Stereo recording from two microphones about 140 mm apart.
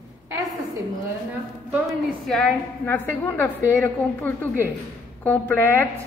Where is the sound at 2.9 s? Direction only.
15° left (ahead or behind).